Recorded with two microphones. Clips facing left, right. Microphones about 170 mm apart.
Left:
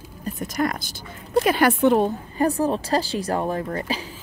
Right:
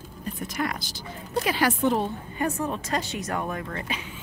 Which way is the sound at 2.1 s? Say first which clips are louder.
Left 6 dB; 35° left (ahead or behind).